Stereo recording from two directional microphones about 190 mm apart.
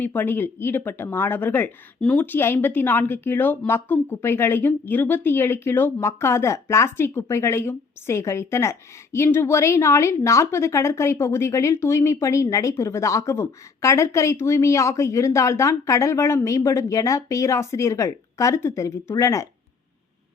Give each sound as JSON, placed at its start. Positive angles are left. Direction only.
{"t": 0.0, "sound": "a woman's voice", "side_deg": 10}